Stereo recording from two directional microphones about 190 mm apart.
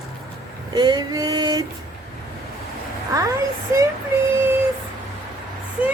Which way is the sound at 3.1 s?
20° right (ahead or behind).